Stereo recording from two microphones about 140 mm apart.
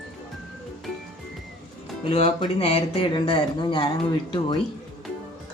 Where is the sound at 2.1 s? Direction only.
50° left (ahead or behind); by 3.9 s 35° left (ahead or behind).